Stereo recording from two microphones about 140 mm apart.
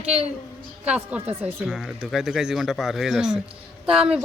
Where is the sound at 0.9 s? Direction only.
10° right (ahead or behind).